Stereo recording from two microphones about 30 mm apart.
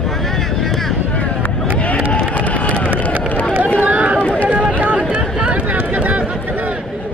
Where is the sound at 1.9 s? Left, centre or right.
Left.